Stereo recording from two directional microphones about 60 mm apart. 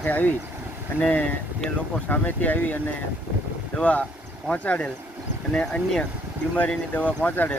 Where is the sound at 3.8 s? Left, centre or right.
Left.